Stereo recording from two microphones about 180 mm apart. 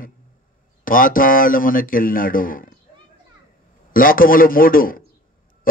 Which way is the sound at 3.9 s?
50° left (ahead or behind).